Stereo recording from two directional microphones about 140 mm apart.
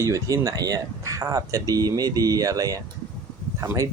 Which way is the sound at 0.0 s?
20° right (ahead or behind).